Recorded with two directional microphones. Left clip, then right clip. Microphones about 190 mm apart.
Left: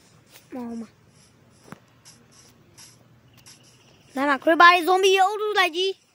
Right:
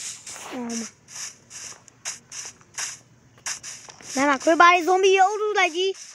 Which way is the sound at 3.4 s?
50° right (ahead or behind).